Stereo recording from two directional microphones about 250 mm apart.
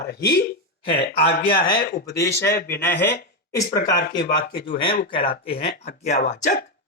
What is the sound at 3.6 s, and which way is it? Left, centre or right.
Speech, left.